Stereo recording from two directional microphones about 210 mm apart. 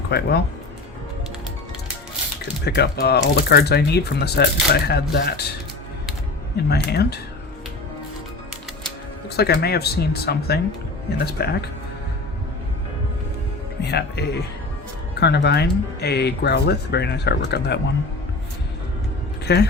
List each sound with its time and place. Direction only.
0.1 s speech: 50° left (ahead or behind)
2.6 s speech: 50° left (ahead or behind)
6.7 s speech: 50° left (ahead or behind)
9.3 s speech: 50° left (ahead or behind)
13.8 s speech: 50° left (ahead or behind)
19.5 s speech: 50° left (ahead or behind)